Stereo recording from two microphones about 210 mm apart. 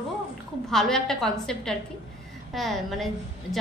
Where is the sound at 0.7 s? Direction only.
Centre (ahead or behind).